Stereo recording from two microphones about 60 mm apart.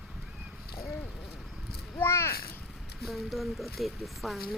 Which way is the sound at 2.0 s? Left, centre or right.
Left.